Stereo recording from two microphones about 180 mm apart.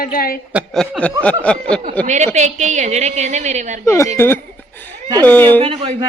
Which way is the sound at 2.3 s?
40° right (ahead or behind).